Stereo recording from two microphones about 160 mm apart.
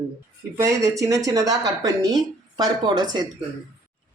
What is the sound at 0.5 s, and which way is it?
Speech, 20° right (ahead or behind).